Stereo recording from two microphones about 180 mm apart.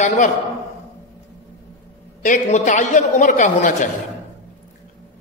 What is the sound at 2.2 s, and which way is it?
A man's voice, 45° left (ahead or behind).